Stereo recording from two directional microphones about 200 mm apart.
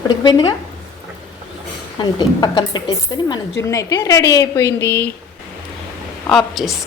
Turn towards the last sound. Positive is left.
turn(degrees=0)  # may be behind; listen again after turning